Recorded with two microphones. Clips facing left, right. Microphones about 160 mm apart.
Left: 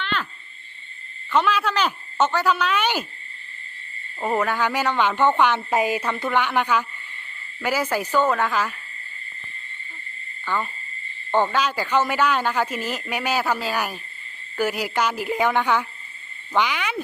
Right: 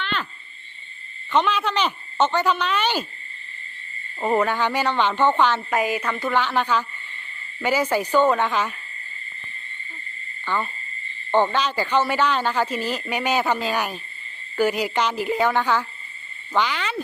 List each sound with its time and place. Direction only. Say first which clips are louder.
1.3 s a woman's voice: even; 5° left (ahead or behind)
4.2 s a woman's voice: right 2 dB; 5° right (ahead or behind)
4.4 s speech: even; 10° left (ahead or behind)
5.7 s a woman's voice: left 1 dB; 30° left (ahead or behind)
6.3 s a woman's voice: even; 15° left (ahead or behind)
10.5 s speech: even; 10° left (ahead or behind)